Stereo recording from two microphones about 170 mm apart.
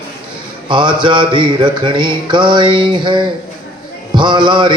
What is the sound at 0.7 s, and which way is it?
Music, 25° right (ahead or behind).